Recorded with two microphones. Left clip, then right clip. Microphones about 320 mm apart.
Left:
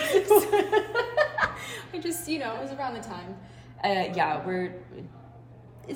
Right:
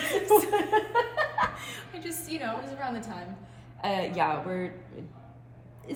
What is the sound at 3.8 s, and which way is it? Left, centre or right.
Speech, centre.